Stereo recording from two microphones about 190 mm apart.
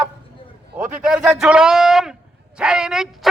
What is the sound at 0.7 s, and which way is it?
Speech, 5° right (ahead or behind).